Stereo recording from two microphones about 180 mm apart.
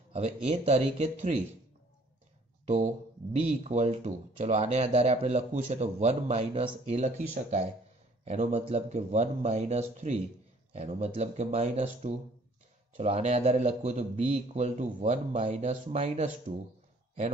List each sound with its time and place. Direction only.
0.1 s speech: 35° right (ahead or behind)
2.6 s speech: 45° right (ahead or behind)
8.3 s speech: 35° right (ahead or behind)